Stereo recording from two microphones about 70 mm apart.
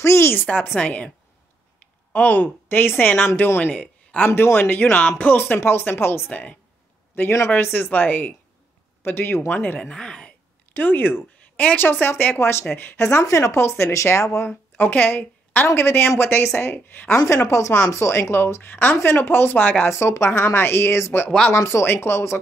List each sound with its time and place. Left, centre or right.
0.0 s a sound: left
0.3 s speech: left
2.1 s speech: left
3.8 s a sound: centre
4.6 s speech: left
10.7 s speech: left
14.8 s speech: left
16.7 s speech: left
17.5 s speech: left
19.9 s speech: left